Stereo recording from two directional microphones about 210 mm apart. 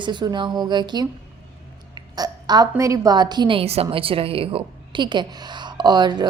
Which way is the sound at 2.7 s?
15° right (ahead or behind).